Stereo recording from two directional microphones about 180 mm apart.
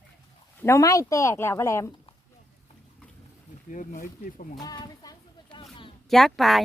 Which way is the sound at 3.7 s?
45° left (ahead or behind).